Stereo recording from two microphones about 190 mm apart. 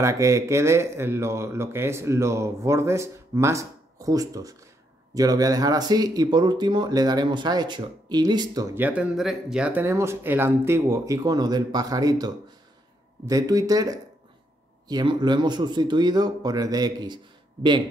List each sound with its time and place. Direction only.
0.0 s speech: 15° right (ahead or behind)